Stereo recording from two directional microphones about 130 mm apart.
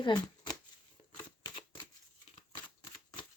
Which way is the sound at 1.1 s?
35° left (ahead or behind).